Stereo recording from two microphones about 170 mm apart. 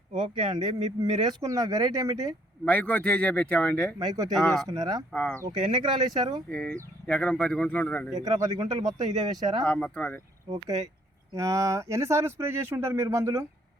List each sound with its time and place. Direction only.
0.3 s speech: 30° right (ahead or behind)
2.6 s speech: 10° left (ahead or behind)
3.9 s speech: 20° right (ahead or behind)
4.4 s speech: centre (ahead or behind)
4.7 s speech: 20° right (ahead or behind)
5.1 s speech: 5° left (ahead or behind)
5.4 s speech: 25° right (ahead or behind)
6.5 s speech: 5° left (ahead or behind)
8.1 s speech: 25° right (ahead or behind)
9.6 s speech: 5° left (ahead or behind)
11.3 s speech: 20° right (ahead or behind)